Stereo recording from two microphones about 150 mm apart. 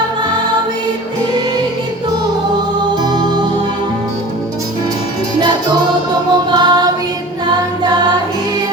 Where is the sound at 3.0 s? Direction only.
25° right (ahead or behind).